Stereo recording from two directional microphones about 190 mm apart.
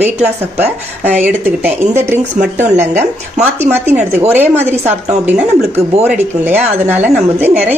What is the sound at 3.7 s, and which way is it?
Speech, 10° right (ahead or behind).